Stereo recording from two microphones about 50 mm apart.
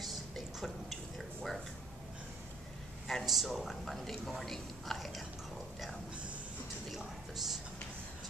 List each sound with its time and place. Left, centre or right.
0.0 s drip: centre
3.1 s speech: centre
6.9 s a sound: centre